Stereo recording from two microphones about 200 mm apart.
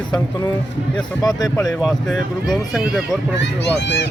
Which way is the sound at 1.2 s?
20° left (ahead or behind).